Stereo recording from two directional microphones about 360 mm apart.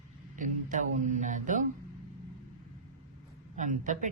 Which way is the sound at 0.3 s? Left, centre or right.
Right.